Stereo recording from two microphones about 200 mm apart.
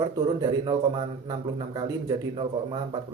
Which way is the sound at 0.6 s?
25° right (ahead or behind).